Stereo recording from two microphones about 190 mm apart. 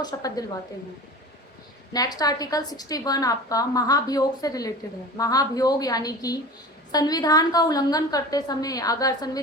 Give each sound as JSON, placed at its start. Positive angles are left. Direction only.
{"t": 0.0, "sound": "a woman's voice", "side_deg": 20}
{"t": 1.9, "sound": "a woman's voice", "side_deg": 20}